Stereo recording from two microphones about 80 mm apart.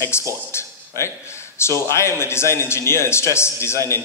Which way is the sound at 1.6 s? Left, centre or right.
Left.